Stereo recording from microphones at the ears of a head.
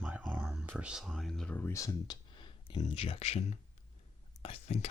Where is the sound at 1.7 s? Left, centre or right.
Left.